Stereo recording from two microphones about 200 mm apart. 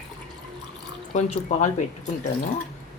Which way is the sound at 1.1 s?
35° left (ahead or behind).